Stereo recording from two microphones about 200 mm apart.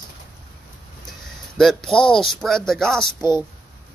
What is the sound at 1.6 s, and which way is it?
Speech, centre (ahead or behind).